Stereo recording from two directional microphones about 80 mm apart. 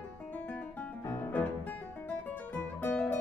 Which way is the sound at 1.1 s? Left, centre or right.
Left.